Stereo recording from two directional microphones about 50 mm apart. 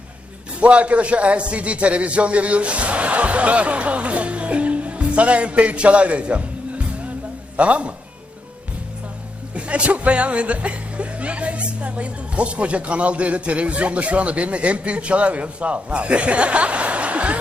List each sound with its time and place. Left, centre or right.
0.6 s a man's voice: right
9.6 s speech: right